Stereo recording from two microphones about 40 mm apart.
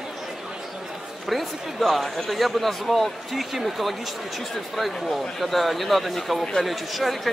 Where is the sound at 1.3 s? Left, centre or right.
Centre.